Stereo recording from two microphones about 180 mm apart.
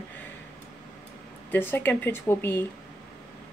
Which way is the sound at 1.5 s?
10° left (ahead or behind).